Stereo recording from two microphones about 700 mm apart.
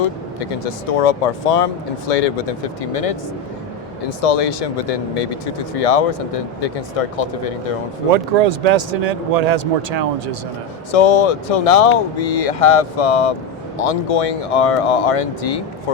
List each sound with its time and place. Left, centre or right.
0.3 s speech: left
4.2 s speech: left
8.1 s speech: right
10.9 s speech: left